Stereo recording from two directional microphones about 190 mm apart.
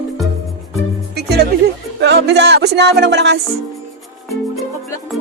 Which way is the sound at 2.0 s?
65° right (ahead or behind).